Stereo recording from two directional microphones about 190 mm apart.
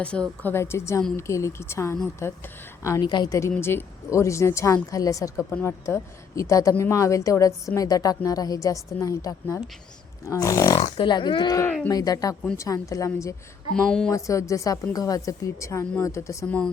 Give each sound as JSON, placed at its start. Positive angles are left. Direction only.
{"t": 0.0, "sound": "speech", "side_deg": 5}
{"t": 10.8, "sound": "speech", "side_deg": 30}
{"t": 13.7, "sound": "speech", "side_deg": 5}
{"t": 14.1, "sound": "speech", "side_deg": 15}